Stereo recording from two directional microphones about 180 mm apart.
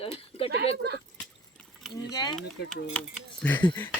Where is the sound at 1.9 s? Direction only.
20° left (ahead or behind).